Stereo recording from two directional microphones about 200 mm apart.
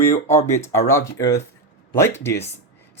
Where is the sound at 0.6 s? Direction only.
15° left (ahead or behind).